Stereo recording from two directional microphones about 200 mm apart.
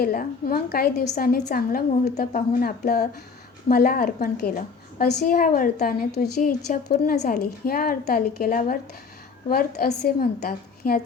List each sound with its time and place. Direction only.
0.0 s a woman's voice: 45° left (ahead or behind)